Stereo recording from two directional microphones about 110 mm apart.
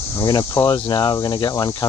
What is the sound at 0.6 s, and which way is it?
Speech, 40° left (ahead or behind).